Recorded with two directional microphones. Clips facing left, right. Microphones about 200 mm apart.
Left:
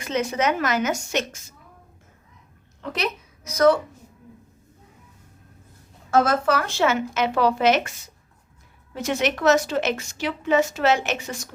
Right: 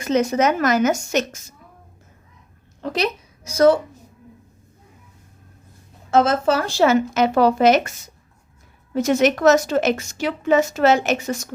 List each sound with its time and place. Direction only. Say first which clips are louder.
0.0 s speech: right 5 dB; 40° right (ahead or behind)
2.8 s a woman's voice: right 5 dB; 35° right (ahead or behind)
6.1 s speech: right 3 dB; 25° right (ahead or behind); by 7.9 s 40° right (ahead or behind)
9.0 s a woman's voice: right 7 dB; 40° right (ahead or behind)